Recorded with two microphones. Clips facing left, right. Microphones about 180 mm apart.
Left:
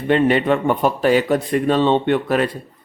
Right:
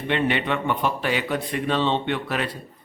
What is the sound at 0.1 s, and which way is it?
Speech, 40° left (ahead or behind).